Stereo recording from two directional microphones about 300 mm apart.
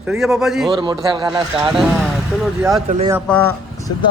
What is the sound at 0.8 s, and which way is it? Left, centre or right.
Speech, centre.